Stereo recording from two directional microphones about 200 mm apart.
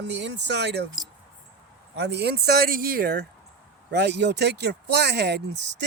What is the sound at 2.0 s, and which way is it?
Speech, 60° right (ahead or behind).